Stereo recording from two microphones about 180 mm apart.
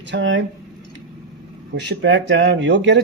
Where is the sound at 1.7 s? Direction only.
80° right.